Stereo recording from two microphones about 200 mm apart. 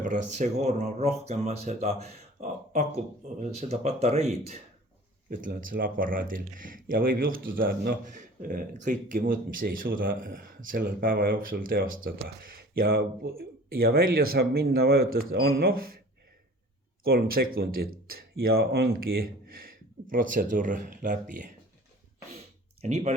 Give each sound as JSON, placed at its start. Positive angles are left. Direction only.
{"t": 0.3, "sound": "speech", "side_deg": -35}
{"t": 17.0, "sound": "speech", "side_deg": -50}
{"t": 20.1, "sound": "speech", "side_deg": -40}
{"t": 22.8, "sound": "speech", "side_deg": -35}